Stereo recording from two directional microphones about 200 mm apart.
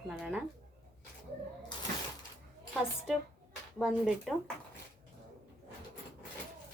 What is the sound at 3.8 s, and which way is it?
Speech, centre (ahead or behind).